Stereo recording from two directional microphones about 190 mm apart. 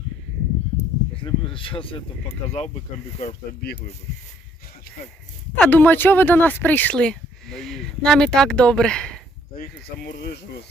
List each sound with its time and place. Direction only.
1.1 s speech: 25° left (ahead or behind)
5.5 s speech: 10° left (ahead or behind)
9.6 s speech: 55° left (ahead or behind)